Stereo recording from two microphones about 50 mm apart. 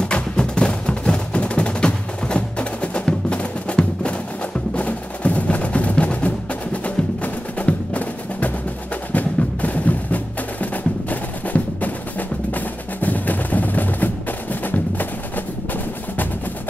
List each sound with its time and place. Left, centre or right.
0.0 s music: centre; by 15.4 s left